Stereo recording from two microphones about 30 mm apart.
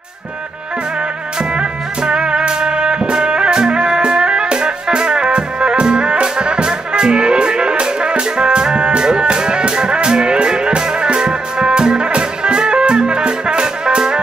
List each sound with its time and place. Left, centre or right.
1.6 s music: right